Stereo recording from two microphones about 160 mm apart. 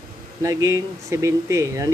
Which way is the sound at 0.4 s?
20° right (ahead or behind).